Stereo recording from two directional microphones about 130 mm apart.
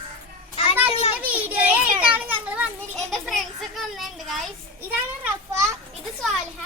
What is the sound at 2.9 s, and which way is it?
Children playing, centre (ahead or behind).